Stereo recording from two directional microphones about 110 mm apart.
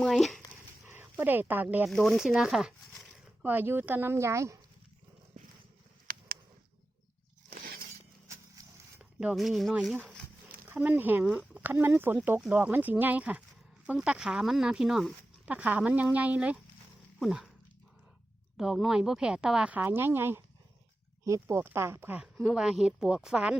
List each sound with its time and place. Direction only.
0.0 s speech: centre (ahead or behind)
0.9 s speech: 20° right (ahead or behind)
1.9 s speech: centre (ahead or behind)
3.4 s speech: 15° right (ahead or behind)
8.6 s zipper: 35° right (ahead or behind)
9.3 s speech: centre (ahead or behind)
15.4 s speech: 15° right (ahead or behind)
18.5 s speech: 5° right (ahead or behind); by 22.2 s 20° right (ahead or behind)
22.2 s speech: 10° right (ahead or behind)